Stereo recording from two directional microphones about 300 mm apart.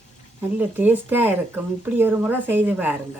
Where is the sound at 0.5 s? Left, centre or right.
Centre.